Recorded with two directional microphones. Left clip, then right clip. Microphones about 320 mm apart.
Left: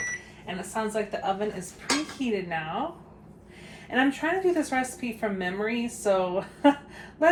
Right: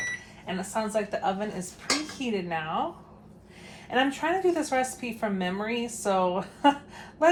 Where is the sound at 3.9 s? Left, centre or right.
Centre.